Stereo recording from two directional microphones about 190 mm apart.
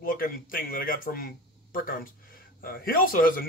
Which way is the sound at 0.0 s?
45° left (ahead or behind).